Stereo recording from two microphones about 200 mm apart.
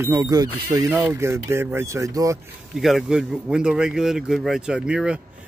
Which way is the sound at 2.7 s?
Centre (ahead or behind).